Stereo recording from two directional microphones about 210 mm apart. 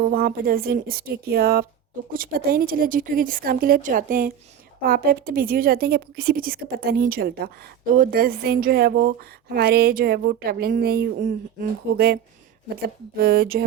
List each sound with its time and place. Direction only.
0.0 s speech: 45° right (ahead or behind)